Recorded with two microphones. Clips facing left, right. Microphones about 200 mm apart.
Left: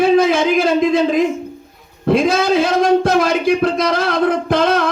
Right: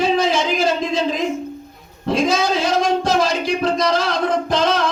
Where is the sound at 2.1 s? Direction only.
55° left (ahead or behind).